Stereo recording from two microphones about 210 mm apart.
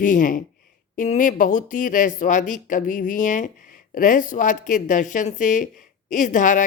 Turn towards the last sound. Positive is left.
turn(degrees=35)  # may be behind; listen again after turning